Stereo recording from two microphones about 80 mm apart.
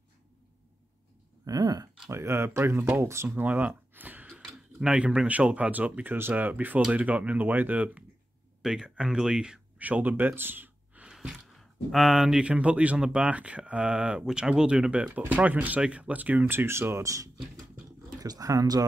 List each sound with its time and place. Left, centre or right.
1.4 s speech: right
2.0 s speech: right
3.3 s speech: right
4.5 s speech: centre
9.8 s speech: centre
11.1 s speech: centre; by 18.9 s right